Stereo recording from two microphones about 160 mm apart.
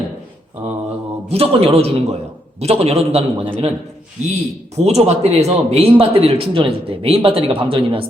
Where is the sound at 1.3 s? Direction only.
40° right (ahead or behind).